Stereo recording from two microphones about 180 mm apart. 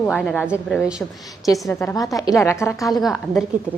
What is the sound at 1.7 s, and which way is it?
A woman's voice, 15° left (ahead or behind).